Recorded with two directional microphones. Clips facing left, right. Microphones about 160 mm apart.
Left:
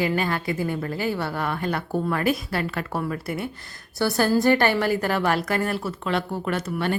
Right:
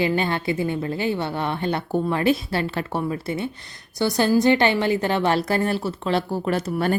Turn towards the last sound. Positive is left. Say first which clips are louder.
# right 3 dB
turn(degrees=-40)  # may be behind; listen again after turning